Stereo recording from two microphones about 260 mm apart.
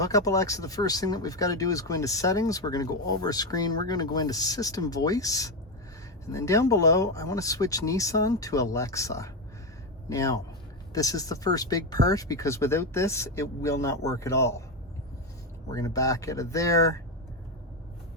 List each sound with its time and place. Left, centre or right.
0.0 s speech: centre
15.7 s speech: centre